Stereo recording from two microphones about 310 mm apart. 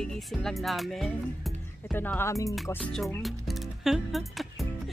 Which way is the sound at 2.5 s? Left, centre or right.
Centre.